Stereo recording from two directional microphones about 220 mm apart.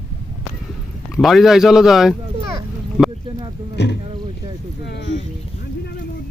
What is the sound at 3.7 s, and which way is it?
Speech, 50° left (ahead or behind).